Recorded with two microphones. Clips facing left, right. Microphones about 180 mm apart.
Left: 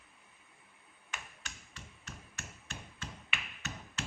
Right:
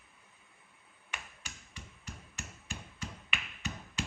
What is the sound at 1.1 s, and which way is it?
Finger snapping, 10° right (ahead or behind).